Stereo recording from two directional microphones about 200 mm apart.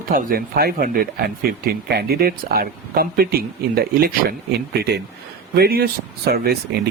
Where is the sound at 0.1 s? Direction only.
45° right (ahead or behind).